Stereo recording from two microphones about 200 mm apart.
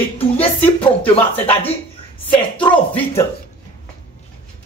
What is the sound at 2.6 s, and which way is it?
Speech, 25° left (ahead or behind).